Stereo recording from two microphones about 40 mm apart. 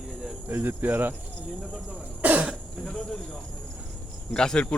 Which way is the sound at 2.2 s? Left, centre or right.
Right.